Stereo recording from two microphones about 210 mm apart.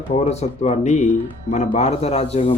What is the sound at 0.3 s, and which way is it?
Speech, 30° left (ahead or behind).